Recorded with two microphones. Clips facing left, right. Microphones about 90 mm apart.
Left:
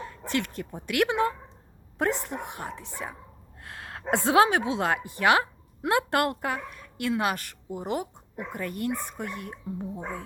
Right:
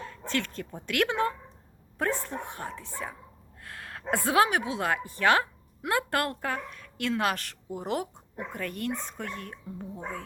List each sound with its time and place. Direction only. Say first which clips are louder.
0.3 s a woman's voice: left 2 dB; 15° left (ahead or behind)